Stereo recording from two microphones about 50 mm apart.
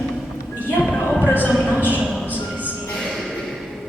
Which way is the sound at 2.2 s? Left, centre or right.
Right.